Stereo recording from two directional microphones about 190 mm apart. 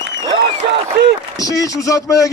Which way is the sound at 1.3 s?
20° left (ahead or behind).